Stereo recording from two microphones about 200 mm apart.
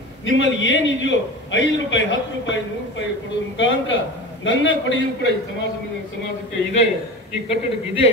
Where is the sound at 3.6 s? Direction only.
70° left (ahead or behind).